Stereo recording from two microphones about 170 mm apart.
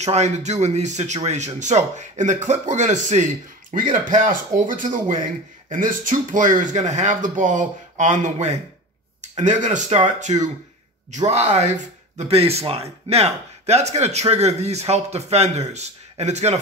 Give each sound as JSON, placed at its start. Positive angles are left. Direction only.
{"t": 0.0, "sound": "speech", "side_deg": -40}